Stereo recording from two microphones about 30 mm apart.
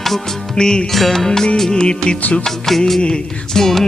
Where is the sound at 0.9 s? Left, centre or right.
Centre.